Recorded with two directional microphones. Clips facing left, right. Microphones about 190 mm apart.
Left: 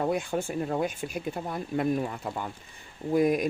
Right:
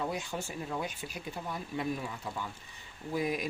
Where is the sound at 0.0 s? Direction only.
55° left (ahead or behind).